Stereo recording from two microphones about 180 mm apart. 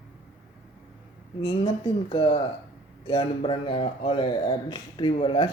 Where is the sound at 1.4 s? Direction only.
25° left (ahead or behind).